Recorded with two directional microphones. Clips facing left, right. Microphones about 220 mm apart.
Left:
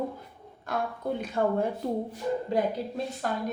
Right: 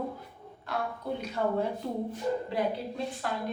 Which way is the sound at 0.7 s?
45° left (ahead or behind).